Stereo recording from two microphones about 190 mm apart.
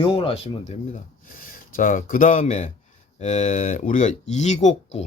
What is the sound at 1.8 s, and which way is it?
Speech, 45° left (ahead or behind).